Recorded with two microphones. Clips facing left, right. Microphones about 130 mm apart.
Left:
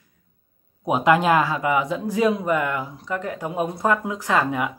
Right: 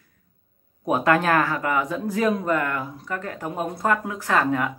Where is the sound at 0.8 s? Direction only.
15° left (ahead or behind).